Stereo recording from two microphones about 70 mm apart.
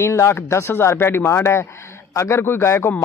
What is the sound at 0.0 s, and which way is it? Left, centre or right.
Speech, left.